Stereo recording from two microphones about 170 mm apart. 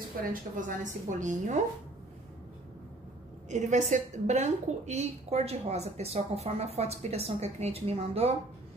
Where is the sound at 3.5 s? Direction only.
45° right (ahead or behind).